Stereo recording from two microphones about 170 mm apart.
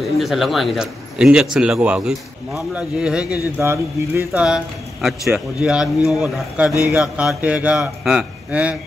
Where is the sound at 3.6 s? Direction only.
15° right (ahead or behind).